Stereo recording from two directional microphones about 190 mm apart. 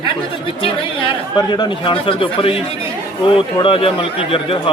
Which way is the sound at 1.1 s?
25° left (ahead or behind).